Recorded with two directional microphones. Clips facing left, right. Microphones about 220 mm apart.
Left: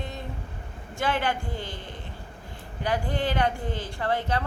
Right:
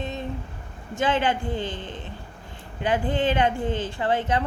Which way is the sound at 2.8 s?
20° right (ahead or behind).